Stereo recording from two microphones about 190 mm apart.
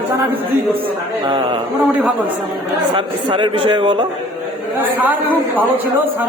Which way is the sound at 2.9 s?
25° right (ahead or behind).